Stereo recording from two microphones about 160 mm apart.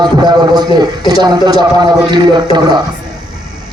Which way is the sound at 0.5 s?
25° right (ahead or behind).